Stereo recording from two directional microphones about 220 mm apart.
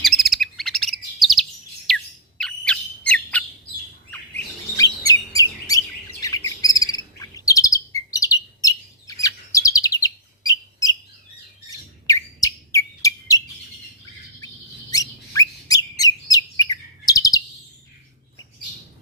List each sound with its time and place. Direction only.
0.0 s chirp: centre (ahead or behind)
1.9 s squawk: centre (ahead or behind)
2.4 s bird: 5° left (ahead or behind)
4.8 s bird: 15° left (ahead or behind)
6.2 s chirp: 15° left (ahead or behind)
11.7 s bird: 15° left (ahead or behind)
14.4 s bird: 15° left (ahead or behind)